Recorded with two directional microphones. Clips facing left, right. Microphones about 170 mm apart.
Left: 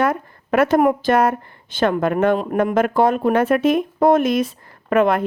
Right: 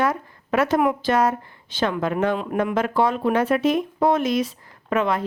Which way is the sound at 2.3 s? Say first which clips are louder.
Left 5 dB; 45° left (ahead or behind).